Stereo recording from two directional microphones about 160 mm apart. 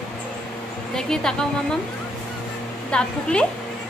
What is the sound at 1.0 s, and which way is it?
Speech, 5° left (ahead or behind).